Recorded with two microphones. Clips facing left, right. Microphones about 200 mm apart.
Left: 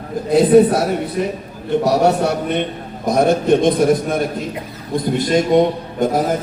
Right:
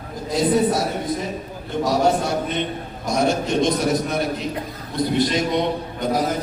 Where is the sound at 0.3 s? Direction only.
60° left (ahead or behind).